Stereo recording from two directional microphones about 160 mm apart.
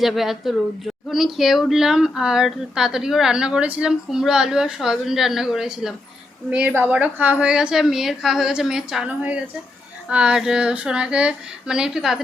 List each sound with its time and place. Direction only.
0.0 s speech: centre (ahead or behind)